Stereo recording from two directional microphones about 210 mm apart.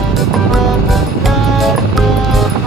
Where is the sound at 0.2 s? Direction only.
Centre (ahead or behind).